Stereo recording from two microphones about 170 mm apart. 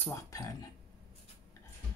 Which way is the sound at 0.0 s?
20° left (ahead or behind).